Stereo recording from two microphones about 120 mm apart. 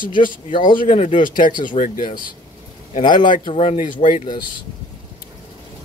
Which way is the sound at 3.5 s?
60° left (ahead or behind).